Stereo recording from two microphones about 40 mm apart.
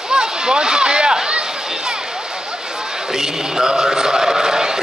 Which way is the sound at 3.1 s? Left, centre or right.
Centre.